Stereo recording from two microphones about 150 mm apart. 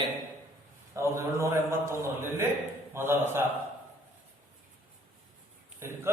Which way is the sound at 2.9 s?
15° right (ahead or behind).